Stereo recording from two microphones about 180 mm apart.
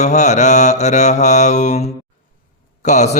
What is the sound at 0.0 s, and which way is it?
Mantra, 40° left (ahead or behind).